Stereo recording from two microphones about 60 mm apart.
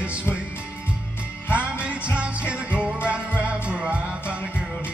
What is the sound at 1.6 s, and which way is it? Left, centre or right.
Music, right.